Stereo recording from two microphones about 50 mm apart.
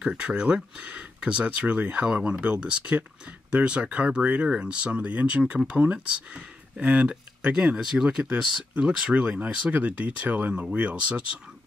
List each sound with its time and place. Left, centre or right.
0.0 s speech: centre
7.8 s speech: centre
8.8 s speech: right
10.5 s speech: centre